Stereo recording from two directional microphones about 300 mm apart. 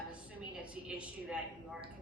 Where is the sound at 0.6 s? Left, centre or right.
Centre.